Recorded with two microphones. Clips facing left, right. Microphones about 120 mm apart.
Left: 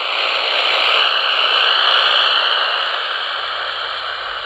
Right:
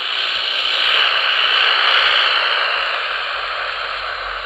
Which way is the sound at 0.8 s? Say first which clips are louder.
Even; 35° left (ahead or behind).